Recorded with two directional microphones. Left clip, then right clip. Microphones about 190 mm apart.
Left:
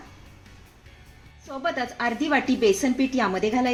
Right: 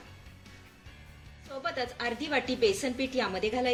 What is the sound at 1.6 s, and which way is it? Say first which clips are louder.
A woman's voice: left 7 dB; 40° left (ahead or behind).